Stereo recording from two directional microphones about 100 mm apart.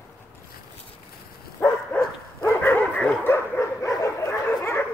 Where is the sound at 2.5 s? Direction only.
20° left (ahead or behind).